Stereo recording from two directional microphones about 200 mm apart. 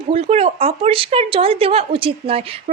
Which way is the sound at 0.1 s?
30° right (ahead or behind).